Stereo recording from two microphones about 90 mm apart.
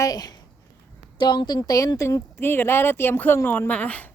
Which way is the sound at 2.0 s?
35° left (ahead or behind).